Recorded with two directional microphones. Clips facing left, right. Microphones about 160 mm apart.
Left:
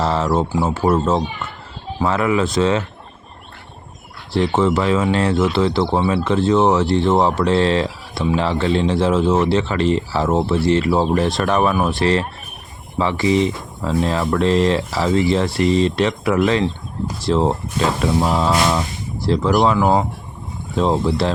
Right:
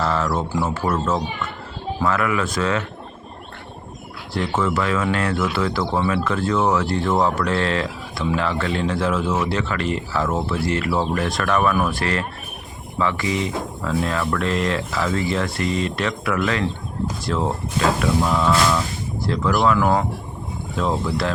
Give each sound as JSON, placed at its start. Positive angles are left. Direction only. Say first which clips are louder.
{"t": 0.0, "sound": "speech", "louder": "left 4 dB", "side_deg": 30}
{"t": 4.4, "sound": "speech", "louder": "left 5 dB", "side_deg": 30}
{"t": 18.0, "sound": "a sound", "louder": "left 2 dB", "side_deg": 30}
{"t": 18.5, "sound": "speech", "louder": "left 1 dB", "side_deg": 30}